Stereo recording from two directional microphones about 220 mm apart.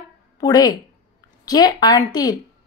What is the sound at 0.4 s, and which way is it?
A woman's voice, 15° left (ahead or behind).